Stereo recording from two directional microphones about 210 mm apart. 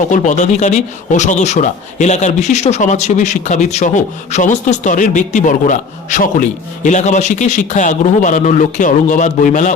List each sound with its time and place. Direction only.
0.1 s speech: 35° left (ahead or behind)